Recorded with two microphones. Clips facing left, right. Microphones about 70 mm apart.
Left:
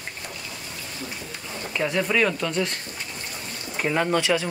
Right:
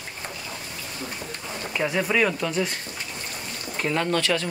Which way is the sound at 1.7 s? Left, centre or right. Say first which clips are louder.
Even; centre.